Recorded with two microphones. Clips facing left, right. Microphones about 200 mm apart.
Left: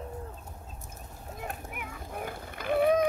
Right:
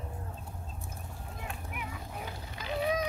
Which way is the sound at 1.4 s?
50° left (ahead or behind).